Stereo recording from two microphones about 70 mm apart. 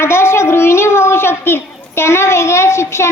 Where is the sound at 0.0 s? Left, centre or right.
Left.